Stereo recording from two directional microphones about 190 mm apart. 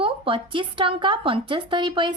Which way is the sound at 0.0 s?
25° right (ahead or behind).